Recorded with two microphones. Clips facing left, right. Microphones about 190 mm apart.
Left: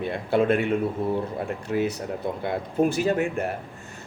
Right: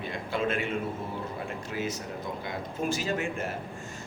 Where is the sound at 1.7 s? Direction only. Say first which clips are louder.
Left 9 dB; 50° left (ahead or behind).